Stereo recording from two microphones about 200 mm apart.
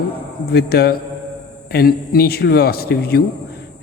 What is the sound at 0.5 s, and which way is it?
A man's voice, 50° left (ahead or behind).